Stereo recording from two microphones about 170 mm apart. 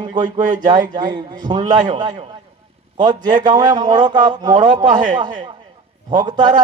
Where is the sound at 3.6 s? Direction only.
25° right (ahead or behind).